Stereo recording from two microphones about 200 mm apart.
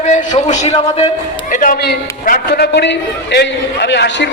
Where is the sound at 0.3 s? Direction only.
35° left (ahead or behind).